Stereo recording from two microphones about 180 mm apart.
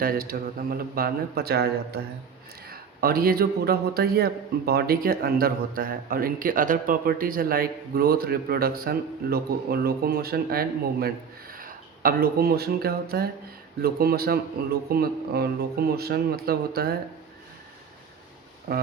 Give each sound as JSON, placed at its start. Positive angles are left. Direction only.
{"t": 0.0, "sound": "a man's voice", "side_deg": -55}
{"t": 18.7, "sound": "speech", "side_deg": -50}